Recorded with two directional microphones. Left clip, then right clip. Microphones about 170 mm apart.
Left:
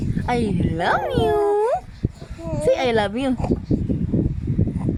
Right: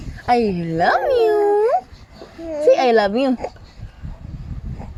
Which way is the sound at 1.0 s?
15° left (ahead or behind).